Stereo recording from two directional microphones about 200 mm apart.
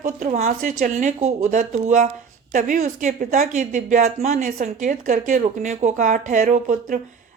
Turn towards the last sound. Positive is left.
turn(degrees=-40)  # may be behind; listen again after turning